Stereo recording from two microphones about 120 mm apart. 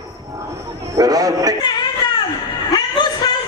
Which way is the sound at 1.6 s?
35° left (ahead or behind).